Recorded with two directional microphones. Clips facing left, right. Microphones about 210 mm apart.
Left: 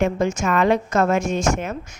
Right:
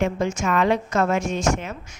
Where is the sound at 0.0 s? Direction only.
45° left (ahead or behind).